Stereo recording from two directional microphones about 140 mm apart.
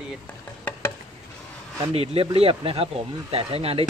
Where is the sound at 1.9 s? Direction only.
45° right (ahead or behind).